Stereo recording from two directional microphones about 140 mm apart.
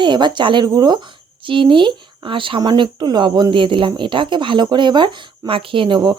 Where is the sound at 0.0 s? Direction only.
35° right (ahead or behind).